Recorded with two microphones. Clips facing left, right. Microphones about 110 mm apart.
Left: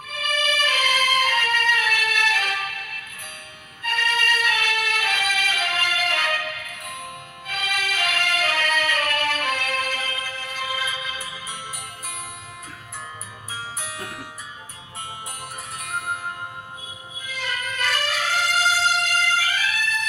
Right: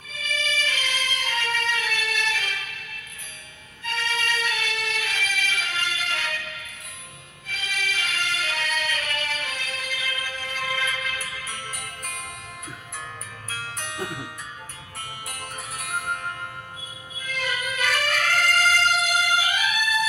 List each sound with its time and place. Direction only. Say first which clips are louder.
0.1 s music: left 5 dB; 55° left (ahead or behind)
10.0 s music: left 2 dB; 35° left (ahead or behind)
10.6 s music: even; 15° left (ahead or behind)
13.5 s music: left 1 dB; 5° left (ahead or behind)
15.8 s music: even; centre (ahead or behind)
17.2 s music: right 1 dB; centre (ahead or behind)
18.9 s music: even; 5° right (ahead or behind)